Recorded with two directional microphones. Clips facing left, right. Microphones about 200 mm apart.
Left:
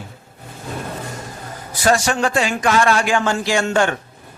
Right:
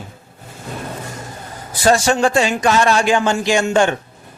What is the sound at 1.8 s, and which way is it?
Speech, 25° right (ahead or behind).